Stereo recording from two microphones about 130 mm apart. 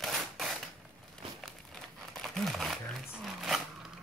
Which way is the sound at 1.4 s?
Centre (ahead or behind).